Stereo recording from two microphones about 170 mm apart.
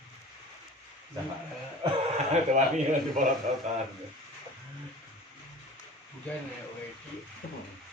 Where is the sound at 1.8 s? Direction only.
30° right (ahead or behind).